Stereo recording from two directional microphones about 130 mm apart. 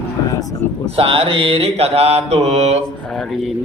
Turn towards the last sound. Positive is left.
turn(degrees=0)  # may be behind; listen again after turning